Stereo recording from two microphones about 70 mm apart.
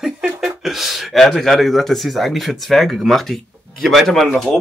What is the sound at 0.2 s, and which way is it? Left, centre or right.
Speech, centre.